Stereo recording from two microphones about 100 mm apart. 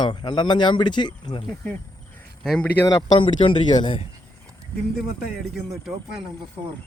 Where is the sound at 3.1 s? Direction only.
60° left (ahead or behind).